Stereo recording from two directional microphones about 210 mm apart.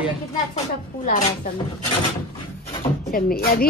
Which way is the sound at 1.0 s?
40° left (ahead or behind).